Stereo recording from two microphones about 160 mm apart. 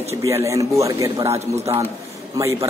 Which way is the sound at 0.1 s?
15° right (ahead or behind).